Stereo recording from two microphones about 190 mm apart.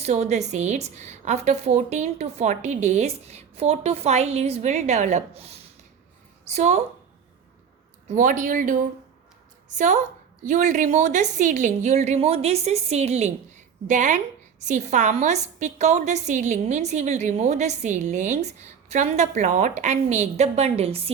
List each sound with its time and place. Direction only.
0.0 s a woman's voice: 35° right (ahead or behind)
8.0 s a woman's voice: 45° right (ahead or behind)